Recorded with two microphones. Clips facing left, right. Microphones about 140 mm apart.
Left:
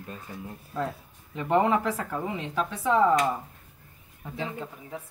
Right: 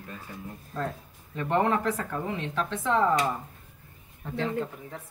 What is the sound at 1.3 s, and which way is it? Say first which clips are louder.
Speech: left 2 dB; 15° left (ahead or behind).